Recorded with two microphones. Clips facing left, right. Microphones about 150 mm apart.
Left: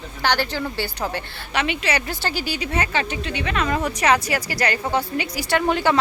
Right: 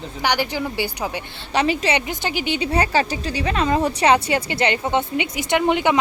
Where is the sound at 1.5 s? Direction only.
35° right (ahead or behind).